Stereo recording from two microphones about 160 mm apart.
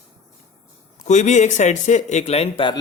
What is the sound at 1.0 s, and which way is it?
Speech, 45° left (ahead or behind).